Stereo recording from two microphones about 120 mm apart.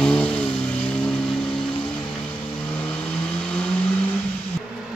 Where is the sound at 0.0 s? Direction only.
5° left (ahead or behind).